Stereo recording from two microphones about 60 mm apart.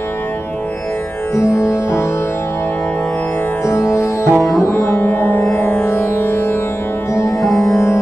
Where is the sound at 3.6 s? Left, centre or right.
Left.